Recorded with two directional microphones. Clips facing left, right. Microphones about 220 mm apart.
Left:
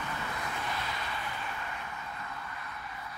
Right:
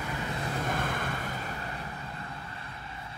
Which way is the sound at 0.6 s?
50° right (ahead or behind).